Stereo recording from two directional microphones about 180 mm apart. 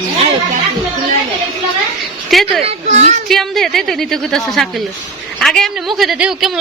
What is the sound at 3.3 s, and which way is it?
A woman's voice, centre (ahead or behind).